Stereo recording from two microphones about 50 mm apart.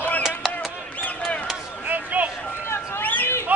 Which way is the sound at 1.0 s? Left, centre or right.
Left.